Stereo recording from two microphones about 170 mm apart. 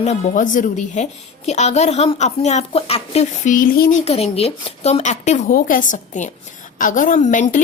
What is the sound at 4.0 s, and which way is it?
A woman's voice, 35° left (ahead or behind).